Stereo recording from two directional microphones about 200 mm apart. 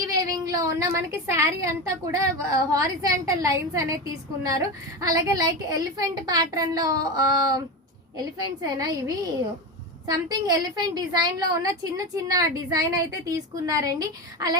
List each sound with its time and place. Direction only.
0.0 s a woman's voice: 15° right (ahead or behind)